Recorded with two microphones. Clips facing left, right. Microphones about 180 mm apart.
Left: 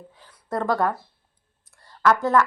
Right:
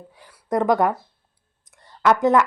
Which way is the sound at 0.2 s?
15° right (ahead or behind).